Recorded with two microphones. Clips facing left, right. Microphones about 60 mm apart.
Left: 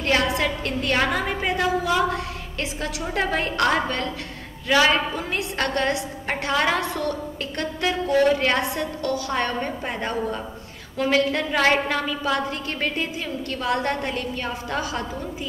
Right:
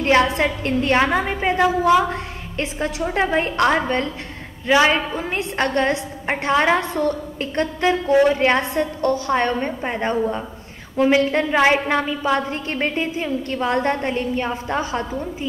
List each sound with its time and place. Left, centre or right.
0.0 s a woman's voice: right